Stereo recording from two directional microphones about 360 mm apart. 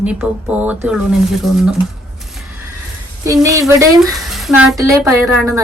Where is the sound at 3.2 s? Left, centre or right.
Centre.